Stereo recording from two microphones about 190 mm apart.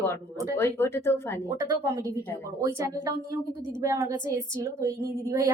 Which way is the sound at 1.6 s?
20° right (ahead or behind).